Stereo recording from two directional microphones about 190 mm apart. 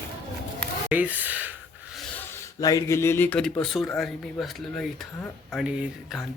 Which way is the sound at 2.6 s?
20° left (ahead or behind).